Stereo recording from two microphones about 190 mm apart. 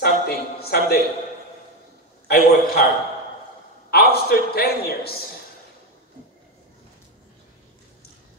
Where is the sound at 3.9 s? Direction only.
55° left (ahead or behind).